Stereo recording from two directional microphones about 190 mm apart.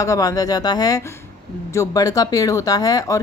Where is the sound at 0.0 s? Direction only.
15° left (ahead or behind).